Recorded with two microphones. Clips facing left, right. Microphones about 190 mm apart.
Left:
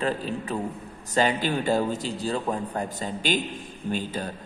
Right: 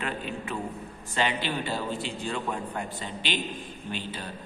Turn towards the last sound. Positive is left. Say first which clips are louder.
# left 6 dB
turn(degrees=45)  # may be behind; listen again after turning